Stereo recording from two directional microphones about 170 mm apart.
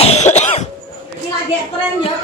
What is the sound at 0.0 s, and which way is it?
Cough, 40° left (ahead or behind).